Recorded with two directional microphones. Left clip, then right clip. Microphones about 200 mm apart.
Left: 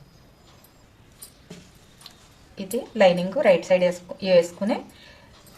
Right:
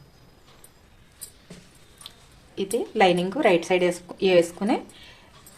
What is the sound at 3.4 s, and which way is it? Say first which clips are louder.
A woman's voice: left 3 dB; 50° right (ahead or behind).